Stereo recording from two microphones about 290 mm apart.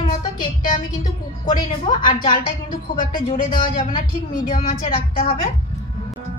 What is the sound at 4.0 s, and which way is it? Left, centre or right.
A woman's voice, left.